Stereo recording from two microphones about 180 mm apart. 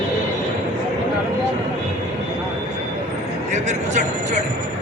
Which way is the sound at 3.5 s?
40° right (ahead or behind).